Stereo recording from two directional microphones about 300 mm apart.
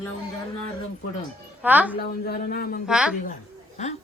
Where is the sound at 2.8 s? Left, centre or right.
Centre.